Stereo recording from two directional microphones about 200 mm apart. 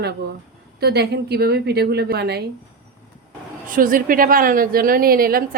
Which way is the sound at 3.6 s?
45° right (ahead or behind).